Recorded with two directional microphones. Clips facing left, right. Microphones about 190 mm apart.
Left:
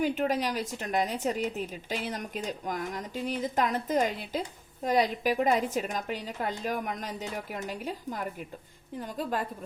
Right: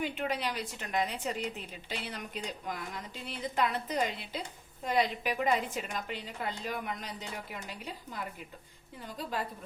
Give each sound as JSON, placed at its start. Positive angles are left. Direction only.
{"t": 0.0, "sound": "speech", "side_deg": 40}